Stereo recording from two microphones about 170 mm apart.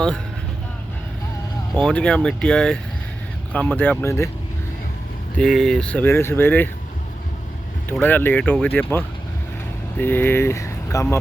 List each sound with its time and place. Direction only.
1.7 s speech: 5° left (ahead or behind)
5.4 s speech: 5° left (ahead or behind)
7.9 s speech: 10° left (ahead or behind)